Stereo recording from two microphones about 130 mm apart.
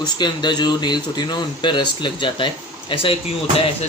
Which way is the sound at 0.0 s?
35° left (ahead or behind).